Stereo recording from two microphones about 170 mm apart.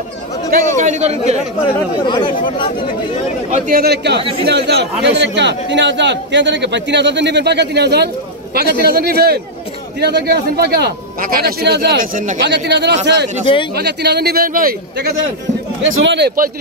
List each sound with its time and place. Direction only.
0.7 s speech: 45° right (ahead or behind)
1.6 s speech: 30° left (ahead or behind)
3.5 s a man's voice: 55° right (ahead or behind); by 4.2 s 75° right (ahead or behind)
4.2 s speech: 30° right (ahead or behind)
4.5 s a man's voice: 90° right
8.5 s a man's voice: 65° right (ahead or behind)
9.9 s a man's voice: 75° right (ahead or behind); by 12.4 s 50° right (ahead or behind)
12.4 s a man's voice: 90° right
13.7 s a man's voice: 75° right (ahead or behind)
16.0 s speech: 85° right